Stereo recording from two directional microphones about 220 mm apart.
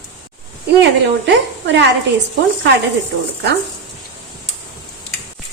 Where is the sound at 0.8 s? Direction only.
50° right (ahead or behind).